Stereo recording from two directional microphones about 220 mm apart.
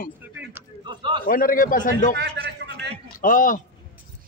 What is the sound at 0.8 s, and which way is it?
Speech, 20° right (ahead or behind).